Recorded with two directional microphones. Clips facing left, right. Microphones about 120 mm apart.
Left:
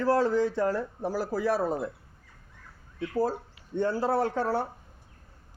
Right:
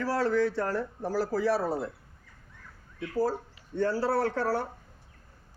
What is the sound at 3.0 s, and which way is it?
A man's voice, 25° left (ahead or behind).